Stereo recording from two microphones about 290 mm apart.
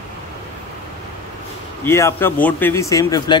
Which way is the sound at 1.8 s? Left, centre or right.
Centre.